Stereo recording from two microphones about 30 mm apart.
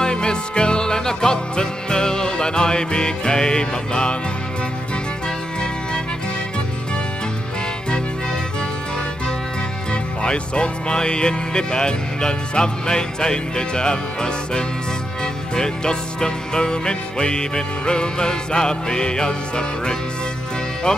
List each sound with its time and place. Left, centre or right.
0.0 s music: left
10.2 s music: left